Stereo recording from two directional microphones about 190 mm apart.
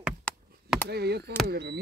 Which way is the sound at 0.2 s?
5° left (ahead or behind).